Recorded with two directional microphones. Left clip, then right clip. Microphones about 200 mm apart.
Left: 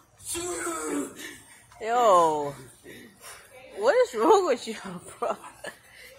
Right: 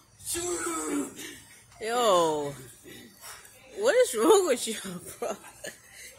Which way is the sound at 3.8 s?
25° right (ahead or behind).